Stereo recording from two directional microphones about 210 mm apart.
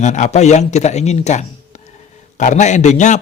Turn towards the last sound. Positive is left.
turn(degrees=35)  # may be behind; listen again after turning